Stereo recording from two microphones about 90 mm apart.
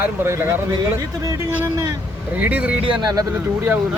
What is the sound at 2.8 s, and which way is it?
Speech, 60° right (ahead or behind).